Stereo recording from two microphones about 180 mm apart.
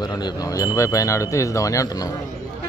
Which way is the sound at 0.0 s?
25° left (ahead or behind).